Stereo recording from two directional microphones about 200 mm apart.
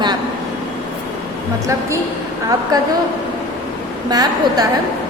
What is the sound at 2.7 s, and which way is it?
Speech, 20° right (ahead or behind).